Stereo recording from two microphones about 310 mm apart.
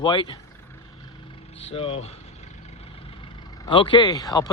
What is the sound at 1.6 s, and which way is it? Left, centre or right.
Speech, centre.